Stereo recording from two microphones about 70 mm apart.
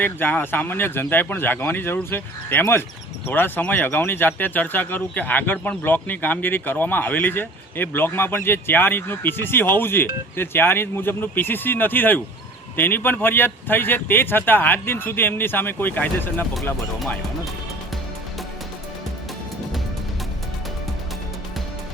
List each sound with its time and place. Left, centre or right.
0.0 s speech: left